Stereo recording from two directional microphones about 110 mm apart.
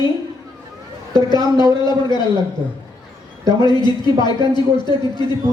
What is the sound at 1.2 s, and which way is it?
Speech, 40° left (ahead or behind).